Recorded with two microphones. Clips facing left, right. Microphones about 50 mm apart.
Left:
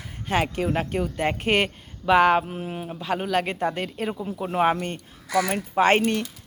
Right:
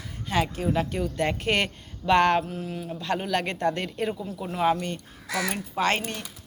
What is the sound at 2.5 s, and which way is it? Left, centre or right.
Speech, left.